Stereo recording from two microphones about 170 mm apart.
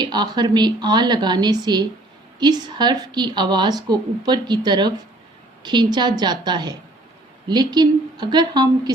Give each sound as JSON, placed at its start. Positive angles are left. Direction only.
{"t": 0.0, "sound": "a woman's voice", "side_deg": -25}